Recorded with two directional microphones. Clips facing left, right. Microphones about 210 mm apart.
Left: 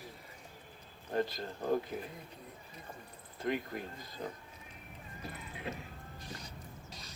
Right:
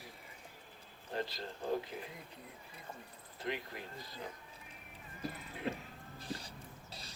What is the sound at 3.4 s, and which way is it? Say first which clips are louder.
Speech: left 5 dB; 50° left (ahead or behind).